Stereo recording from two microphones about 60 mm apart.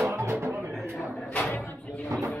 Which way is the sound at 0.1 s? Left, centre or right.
Right.